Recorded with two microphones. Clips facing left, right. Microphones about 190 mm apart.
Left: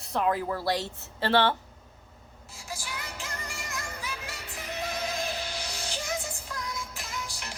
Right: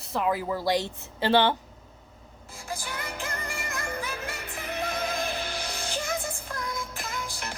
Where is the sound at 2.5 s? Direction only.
55° right (ahead or behind).